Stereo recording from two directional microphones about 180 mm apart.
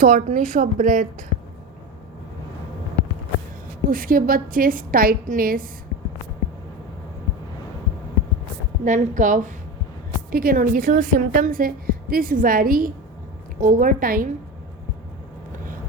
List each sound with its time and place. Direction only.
0.0 s a woman's voice: 50° right (ahead or behind)
3.8 s a woman's voice: 50° right (ahead or behind)
8.8 s a woman's voice: 45° right (ahead or behind)